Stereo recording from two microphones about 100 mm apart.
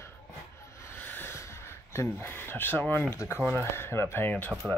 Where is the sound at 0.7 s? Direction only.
25° left (ahead or behind).